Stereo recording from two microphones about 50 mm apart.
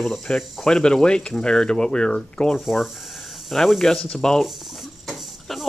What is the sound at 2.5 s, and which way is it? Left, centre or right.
Speech, centre.